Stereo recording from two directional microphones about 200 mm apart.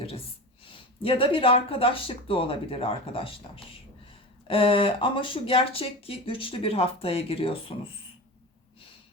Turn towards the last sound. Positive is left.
turn(degrees=25)  # may be behind; listen again after turning